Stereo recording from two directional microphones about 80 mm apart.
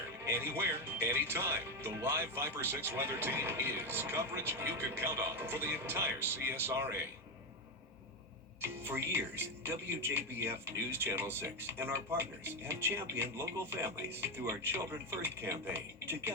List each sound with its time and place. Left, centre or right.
0.3 s speech: right
8.6 s speech: right